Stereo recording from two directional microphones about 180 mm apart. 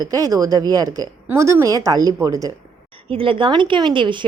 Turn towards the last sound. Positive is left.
turn(degrees=-25)  # may be behind; listen again after turning